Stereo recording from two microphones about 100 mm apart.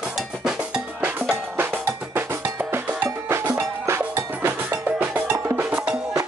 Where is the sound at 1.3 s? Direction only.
20° right (ahead or behind).